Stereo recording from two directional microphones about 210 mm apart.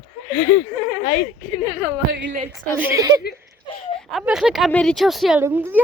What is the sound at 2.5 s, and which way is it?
Speech, 10° right (ahead or behind).